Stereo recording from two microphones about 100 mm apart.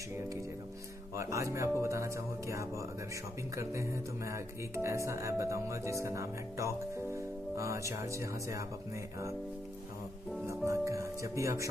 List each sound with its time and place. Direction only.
1.1 s speech: 30° right (ahead or behind)
10.4 s speech: 30° right (ahead or behind)